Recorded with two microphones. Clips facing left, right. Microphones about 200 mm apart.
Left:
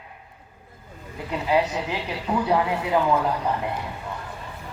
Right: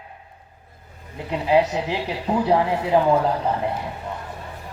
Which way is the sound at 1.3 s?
25° right (ahead or behind).